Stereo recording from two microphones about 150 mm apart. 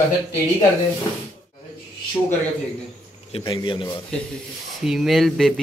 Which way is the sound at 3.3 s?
30° left (ahead or behind).